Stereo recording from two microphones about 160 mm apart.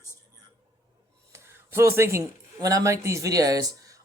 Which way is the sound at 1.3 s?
15° right (ahead or behind).